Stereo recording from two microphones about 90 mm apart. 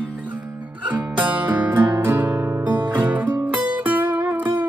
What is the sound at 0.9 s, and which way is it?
Music, 20° right (ahead or behind).